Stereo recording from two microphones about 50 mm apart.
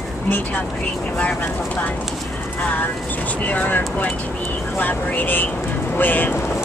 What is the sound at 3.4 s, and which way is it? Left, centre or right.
Speech, left.